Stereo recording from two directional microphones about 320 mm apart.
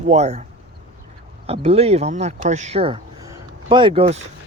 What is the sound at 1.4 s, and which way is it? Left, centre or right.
Speech, centre.